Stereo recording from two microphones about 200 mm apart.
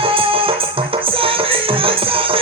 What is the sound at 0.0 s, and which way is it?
Music, 25° right (ahead or behind).